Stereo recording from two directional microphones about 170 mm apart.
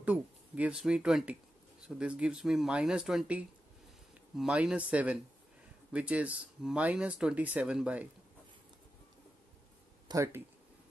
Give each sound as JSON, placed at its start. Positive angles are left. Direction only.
{"t": 0.0, "sound": "speech", "side_deg": -10}
{"t": 10.0, "sound": "speech", "side_deg": -15}